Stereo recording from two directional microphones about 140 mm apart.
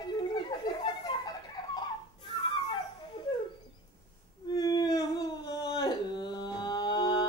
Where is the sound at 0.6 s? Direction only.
30° left (ahead or behind).